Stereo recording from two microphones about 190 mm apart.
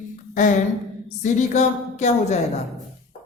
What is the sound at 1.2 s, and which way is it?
Speech, 40° left (ahead or behind).